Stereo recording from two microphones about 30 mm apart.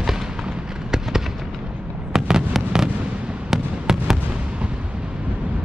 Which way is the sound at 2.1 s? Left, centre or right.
Centre.